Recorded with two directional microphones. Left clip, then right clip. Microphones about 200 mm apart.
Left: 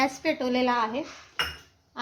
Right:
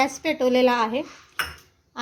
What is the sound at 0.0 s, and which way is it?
A woman's voice, 20° right (ahead or behind).